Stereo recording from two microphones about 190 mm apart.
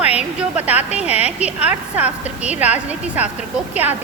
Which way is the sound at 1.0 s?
35° left (ahead or behind).